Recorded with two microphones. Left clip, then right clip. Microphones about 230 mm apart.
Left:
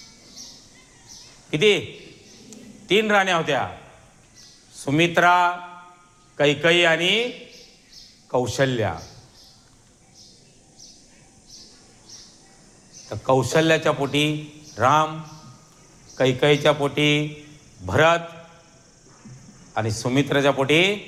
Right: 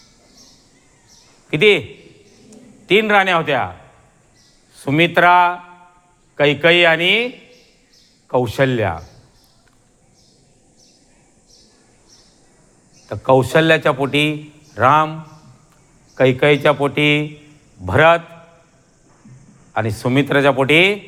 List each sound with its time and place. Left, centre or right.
1.5 s a man's voice: right
2.8 s a man's voice: right
4.7 s a man's voice: right
8.3 s speech: right
13.1 s a man's voice: right
16.1 s a man's voice: right
19.7 s a man's voice: right